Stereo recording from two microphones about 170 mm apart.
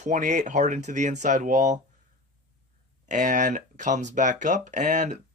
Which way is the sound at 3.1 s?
50° right (ahead or behind).